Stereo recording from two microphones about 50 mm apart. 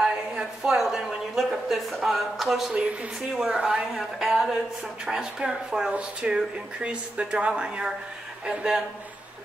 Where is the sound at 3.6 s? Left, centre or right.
Centre.